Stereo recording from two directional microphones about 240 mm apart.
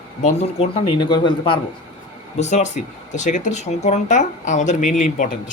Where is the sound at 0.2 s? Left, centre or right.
Left.